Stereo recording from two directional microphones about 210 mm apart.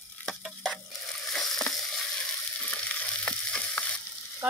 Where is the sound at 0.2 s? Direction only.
5° left (ahead or behind).